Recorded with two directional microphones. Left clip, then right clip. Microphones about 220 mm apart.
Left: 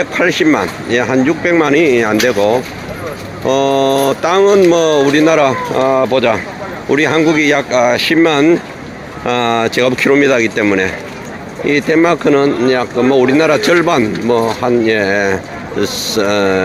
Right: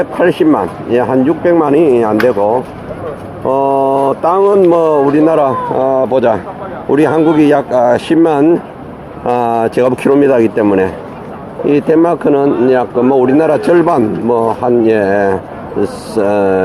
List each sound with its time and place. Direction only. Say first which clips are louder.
0.0 s speech: right 2 dB; centre (ahead or behind)
4.0 s speech: right 1 dB; 20° left (ahead or behind)
4.5 s speech: right 1 dB; 10° left (ahead or behind)
11.9 s speech: even; 5° right (ahead or behind)